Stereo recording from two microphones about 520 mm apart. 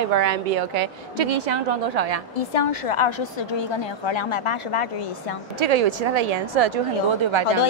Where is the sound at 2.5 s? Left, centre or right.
Left.